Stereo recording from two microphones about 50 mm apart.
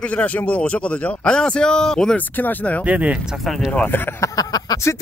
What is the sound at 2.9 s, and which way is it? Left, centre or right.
Speech, right.